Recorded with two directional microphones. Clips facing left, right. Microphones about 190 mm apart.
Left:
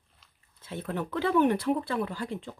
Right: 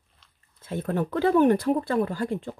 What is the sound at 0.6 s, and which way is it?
Speech, 45° right (ahead or behind).